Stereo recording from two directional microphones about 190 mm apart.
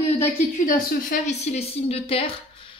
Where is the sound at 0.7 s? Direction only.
45° left (ahead or behind).